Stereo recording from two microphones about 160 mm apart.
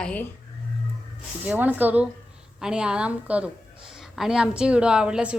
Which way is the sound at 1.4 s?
10° right (ahead or behind).